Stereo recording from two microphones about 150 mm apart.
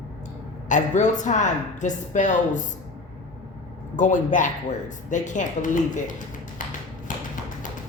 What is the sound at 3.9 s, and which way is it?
A woman's voice, 55° left (ahead or behind).